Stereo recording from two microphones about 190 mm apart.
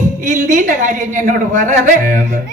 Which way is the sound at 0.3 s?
40° right (ahead or behind).